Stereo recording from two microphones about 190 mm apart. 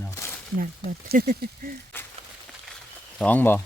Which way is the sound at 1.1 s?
50° right (ahead or behind).